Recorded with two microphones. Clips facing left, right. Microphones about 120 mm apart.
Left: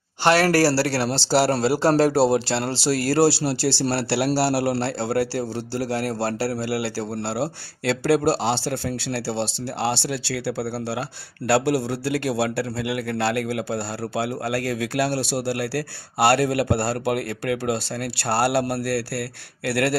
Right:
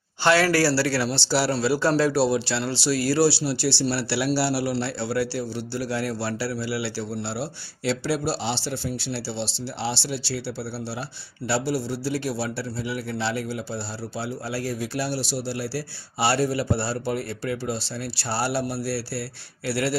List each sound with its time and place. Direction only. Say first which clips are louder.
0.4 s speech: left 2 dB; 40° left (ahead or behind)
1.0 s a man's voice: left 4 dB; 55° left (ahead or behind)